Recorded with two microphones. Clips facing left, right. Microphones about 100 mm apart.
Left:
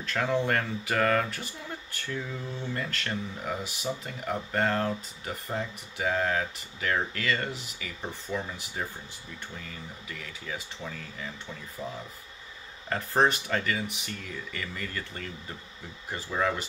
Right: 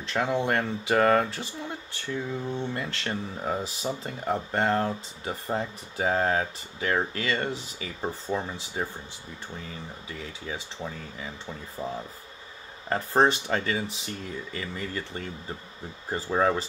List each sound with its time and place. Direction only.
0.0 s speech: 20° right (ahead or behind)